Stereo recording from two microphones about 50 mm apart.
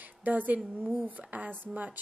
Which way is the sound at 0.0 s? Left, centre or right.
Right.